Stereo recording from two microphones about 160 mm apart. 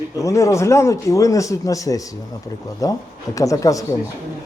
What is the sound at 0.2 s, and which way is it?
Speech, 20° left (ahead or behind).